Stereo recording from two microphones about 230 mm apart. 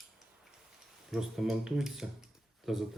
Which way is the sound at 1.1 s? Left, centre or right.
Centre.